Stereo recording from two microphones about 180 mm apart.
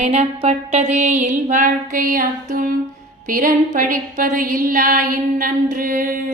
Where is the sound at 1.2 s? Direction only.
40° right (ahead or behind).